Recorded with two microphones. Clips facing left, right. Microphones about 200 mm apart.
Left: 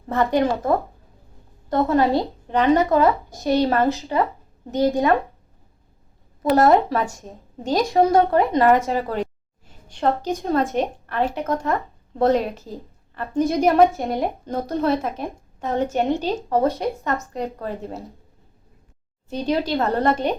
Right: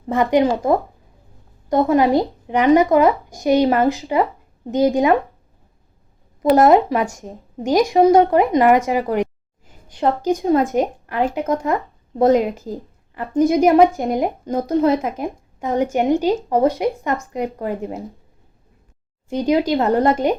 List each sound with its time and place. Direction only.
0.1 s a woman's voice: 15° right (ahead or behind)
6.4 s a woman's voice: 15° right (ahead or behind)
19.5 s a woman's voice: 15° right (ahead or behind)